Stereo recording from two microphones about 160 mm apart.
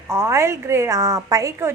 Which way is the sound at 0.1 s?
15° right (ahead or behind).